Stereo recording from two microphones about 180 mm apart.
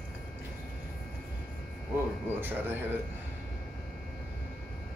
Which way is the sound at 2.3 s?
10° right (ahead or behind).